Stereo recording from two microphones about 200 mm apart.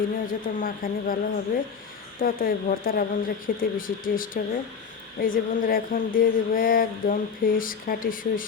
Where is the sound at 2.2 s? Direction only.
45° left (ahead or behind).